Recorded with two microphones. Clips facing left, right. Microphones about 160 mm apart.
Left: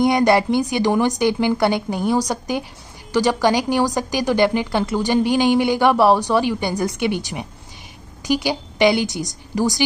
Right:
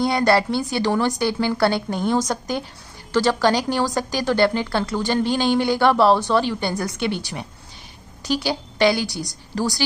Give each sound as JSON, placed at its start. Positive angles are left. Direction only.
{"t": 0.0, "sound": "speech", "side_deg": 15}